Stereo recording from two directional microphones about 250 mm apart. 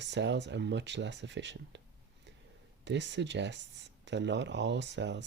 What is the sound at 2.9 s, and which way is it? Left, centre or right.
Speech, right.